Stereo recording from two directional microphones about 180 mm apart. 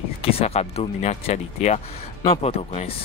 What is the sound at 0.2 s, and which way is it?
Speech, 35° left (ahead or behind).